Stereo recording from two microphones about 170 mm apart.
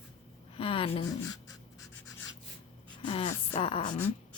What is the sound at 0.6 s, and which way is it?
Speech, 30° left (ahead or behind).